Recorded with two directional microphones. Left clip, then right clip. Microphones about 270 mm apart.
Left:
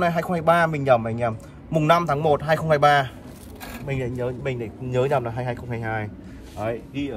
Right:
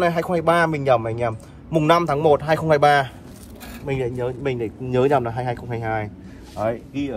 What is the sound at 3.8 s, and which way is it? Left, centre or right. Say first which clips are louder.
Speech: right 3 dB; centre.